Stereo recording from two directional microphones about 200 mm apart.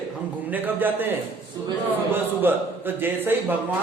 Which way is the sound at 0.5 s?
10° right (ahead or behind).